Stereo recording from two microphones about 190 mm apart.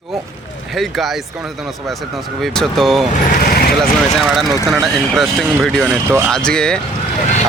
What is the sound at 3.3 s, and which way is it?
Speech, 50° left (ahead or behind).